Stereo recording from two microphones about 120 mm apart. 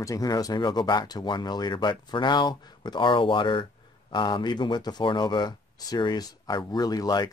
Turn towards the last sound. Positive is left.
turn(degrees=35)  # may be behind; listen again after turning